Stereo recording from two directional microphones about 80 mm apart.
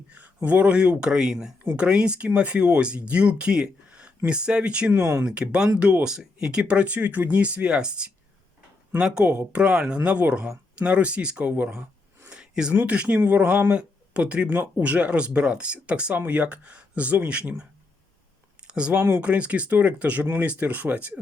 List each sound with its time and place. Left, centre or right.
0.4 s speech: centre
12.3 s a sound: centre
12.7 s speech: centre
18.7 s speech: centre
18.9 s speech: right
19.2 s speech: centre